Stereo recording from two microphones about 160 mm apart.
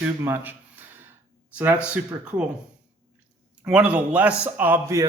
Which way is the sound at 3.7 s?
10° right (ahead or behind).